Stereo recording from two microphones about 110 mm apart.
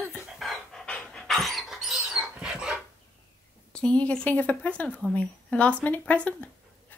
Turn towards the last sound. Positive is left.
turn(degrees=10)  # may be behind; listen again after turning